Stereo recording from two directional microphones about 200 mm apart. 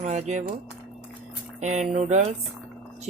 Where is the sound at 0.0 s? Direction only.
35° right (ahead or behind).